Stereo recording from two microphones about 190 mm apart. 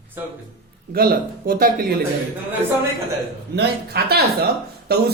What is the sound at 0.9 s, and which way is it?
Speech, 50° right (ahead or behind).